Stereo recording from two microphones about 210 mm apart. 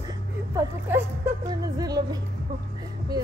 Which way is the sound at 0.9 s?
10° right (ahead or behind).